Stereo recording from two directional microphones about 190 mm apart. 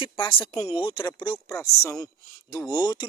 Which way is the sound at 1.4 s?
15° left (ahead or behind).